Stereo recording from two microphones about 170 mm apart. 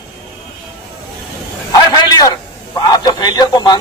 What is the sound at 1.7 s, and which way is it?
Speech, 20° left (ahead or behind).